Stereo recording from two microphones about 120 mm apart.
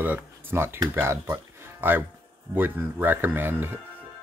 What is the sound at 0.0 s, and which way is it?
Speech, 15° right (ahead or behind).